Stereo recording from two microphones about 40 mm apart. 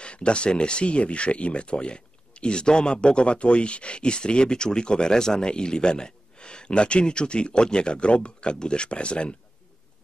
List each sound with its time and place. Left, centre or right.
0.0 s speech: left